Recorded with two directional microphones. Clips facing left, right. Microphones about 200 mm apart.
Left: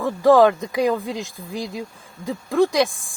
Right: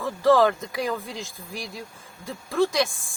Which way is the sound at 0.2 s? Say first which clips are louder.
Left 5 dB; 15° left (ahead or behind).